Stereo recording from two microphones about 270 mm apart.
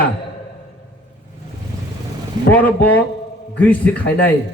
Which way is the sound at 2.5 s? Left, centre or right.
Centre.